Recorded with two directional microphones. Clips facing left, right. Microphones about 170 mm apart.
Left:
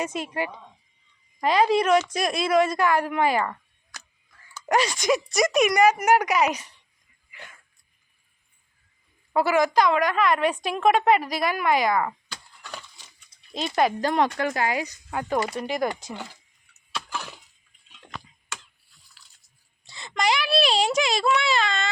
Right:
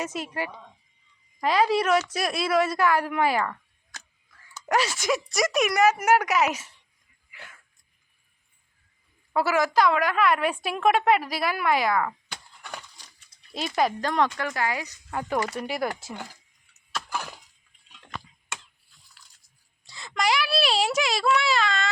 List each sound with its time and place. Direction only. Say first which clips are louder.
0.0 s a woman's voice: left 2 dB; centre (ahead or behind)
4.7 s a woman's voice: left 3 dB; 5° right (ahead or behind)
7.3 s dog: left 2 dB; 5° right (ahead or behind)
9.3 s a woman's voice: left 2 dB; 5° right (ahead or behind)
12.6 s a sound: even; 15° right (ahead or behind)
13.7 s speech: left 2 dB; 5° left (ahead or behind)
14.3 s speech: left 3 dB; 25° left (ahead or behind)
15.1 s speech: left 1 dB; centre (ahead or behind)
17.1 s a sound: right 2 dB; 10° right (ahead or behind)
19.8 s a child's voice: left 1 dB; centre (ahead or behind)